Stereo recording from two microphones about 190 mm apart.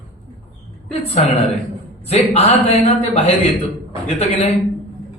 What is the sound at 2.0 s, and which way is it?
A man's voice, 35° left (ahead or behind).